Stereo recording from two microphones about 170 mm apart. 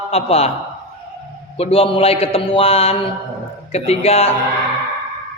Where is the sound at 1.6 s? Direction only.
35° left (ahead or behind).